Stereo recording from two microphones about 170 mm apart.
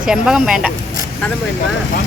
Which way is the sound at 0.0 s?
5° right (ahead or behind).